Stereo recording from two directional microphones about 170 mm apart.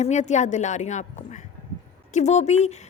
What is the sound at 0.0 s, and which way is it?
A woman's voice, 45° left (ahead or behind).